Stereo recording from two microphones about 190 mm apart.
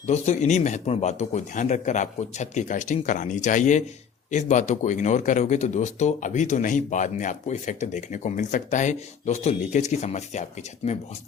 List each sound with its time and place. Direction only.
0.0 s a man's voice: 35° left (ahead or behind)